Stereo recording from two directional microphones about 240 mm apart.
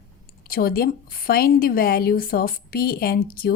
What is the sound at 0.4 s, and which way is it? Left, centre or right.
A woman's voice, left.